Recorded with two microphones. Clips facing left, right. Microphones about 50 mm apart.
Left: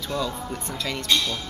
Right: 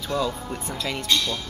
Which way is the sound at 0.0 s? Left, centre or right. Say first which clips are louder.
Right 2 dB; centre.